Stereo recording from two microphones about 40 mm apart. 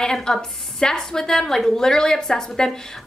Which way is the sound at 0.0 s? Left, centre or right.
Centre.